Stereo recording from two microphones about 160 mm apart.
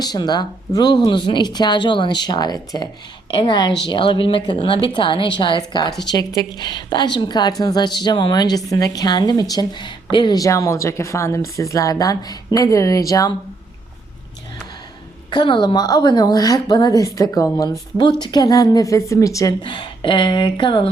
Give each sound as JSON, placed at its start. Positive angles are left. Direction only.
{"t": 0.0, "sound": "a woman's voice", "side_deg": 25}
{"t": 15.3, "sound": "a woman's voice", "side_deg": 30}